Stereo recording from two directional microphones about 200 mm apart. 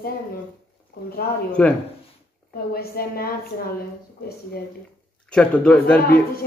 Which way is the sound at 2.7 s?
50° left (ahead or behind).